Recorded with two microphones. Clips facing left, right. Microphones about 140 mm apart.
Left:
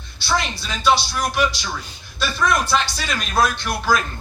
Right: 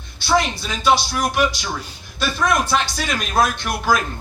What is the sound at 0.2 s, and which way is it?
A man's voice, 45° right (ahead or behind).